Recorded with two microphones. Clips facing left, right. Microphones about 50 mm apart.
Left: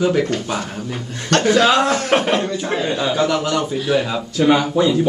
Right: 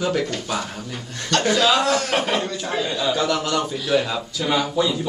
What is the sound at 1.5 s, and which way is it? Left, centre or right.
Speech, left.